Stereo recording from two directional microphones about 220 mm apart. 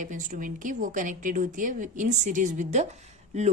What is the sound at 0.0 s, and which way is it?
A woman's voice, 35° right (ahead or behind).